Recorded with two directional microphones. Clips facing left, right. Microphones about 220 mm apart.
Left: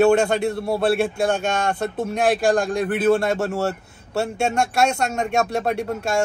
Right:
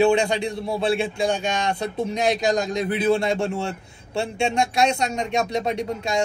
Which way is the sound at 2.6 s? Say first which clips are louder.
Left 2 dB; 50° left (ahead or behind).